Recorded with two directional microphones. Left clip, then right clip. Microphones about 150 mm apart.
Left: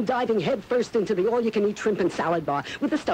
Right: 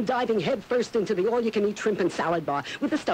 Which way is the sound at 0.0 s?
40° right (ahead or behind).